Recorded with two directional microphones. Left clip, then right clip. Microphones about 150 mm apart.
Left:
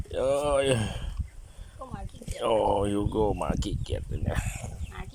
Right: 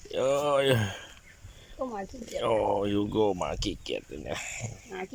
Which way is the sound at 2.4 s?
10° left (ahead or behind).